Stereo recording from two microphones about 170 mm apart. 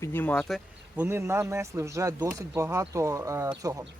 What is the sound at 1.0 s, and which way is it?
Speech, 15° right (ahead or behind).